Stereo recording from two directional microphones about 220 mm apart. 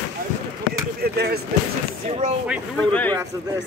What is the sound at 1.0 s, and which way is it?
Speech, 45° right (ahead or behind).